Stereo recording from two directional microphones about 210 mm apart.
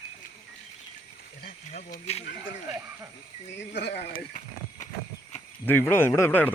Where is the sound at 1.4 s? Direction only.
40° left (ahead or behind).